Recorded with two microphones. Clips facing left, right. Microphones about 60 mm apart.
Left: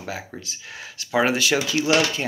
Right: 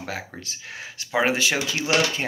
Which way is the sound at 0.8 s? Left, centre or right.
Right.